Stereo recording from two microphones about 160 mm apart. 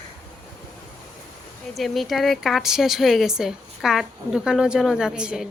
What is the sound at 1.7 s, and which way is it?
A woman's voice, centre (ahead or behind).